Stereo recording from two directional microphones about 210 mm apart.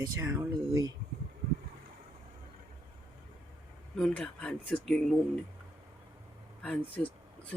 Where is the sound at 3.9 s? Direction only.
5° left (ahead or behind).